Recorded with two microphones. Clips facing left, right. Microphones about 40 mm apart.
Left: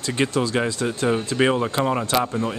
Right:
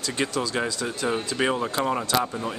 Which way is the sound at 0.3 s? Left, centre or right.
Left.